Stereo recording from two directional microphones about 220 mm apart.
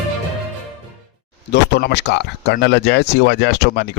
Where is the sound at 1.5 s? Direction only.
50° left (ahead or behind).